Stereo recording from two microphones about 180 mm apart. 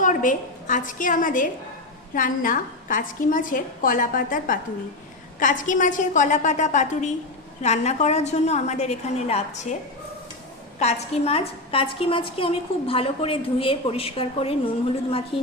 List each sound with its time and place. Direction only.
0.0 s a woman's voice: 45° left (ahead or behind)
10.8 s a woman's voice: 35° left (ahead or behind)